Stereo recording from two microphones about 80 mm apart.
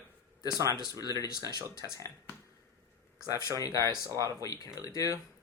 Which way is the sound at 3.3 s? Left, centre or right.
Left.